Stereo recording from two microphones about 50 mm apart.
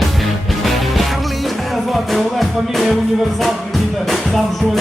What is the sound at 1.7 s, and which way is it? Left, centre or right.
Music, centre.